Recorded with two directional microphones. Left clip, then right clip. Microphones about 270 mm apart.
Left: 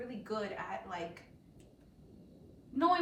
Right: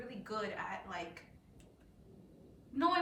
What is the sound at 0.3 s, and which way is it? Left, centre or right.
Speech, centre.